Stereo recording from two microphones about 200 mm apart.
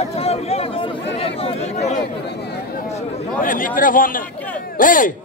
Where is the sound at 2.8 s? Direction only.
30° left (ahead or behind).